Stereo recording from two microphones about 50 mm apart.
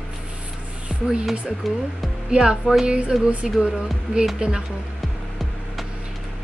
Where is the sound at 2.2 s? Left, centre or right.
Centre.